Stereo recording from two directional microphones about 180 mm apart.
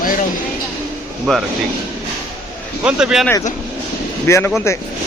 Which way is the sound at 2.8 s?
5° right (ahead or behind).